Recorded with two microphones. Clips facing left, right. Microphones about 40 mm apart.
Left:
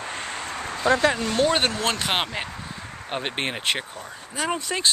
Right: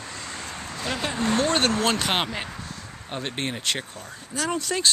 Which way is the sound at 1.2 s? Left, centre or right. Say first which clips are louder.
Even; right.